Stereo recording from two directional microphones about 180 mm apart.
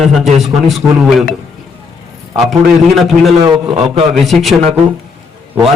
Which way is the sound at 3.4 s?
30° right (ahead or behind).